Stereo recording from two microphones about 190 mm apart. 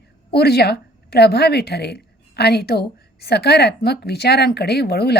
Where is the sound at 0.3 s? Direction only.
55° left (ahead or behind).